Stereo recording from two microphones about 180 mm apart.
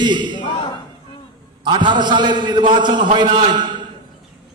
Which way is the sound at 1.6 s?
25° right (ahead or behind).